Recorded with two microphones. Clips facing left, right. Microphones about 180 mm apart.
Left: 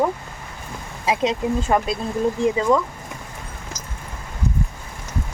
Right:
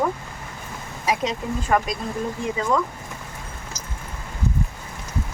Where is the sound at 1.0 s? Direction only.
25° left (ahead or behind).